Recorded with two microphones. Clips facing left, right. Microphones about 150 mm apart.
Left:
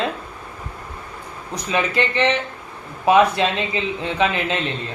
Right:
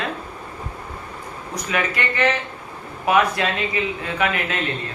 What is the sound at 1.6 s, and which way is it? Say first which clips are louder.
Speech: left 3 dB; 25° left (ahead or behind).